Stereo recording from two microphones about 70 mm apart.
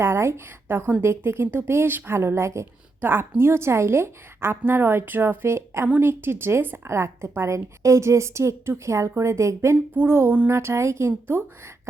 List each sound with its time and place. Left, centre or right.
0.0 s a woman's voice: right
3.0 s a woman's voice: right
9.9 s a woman's voice: right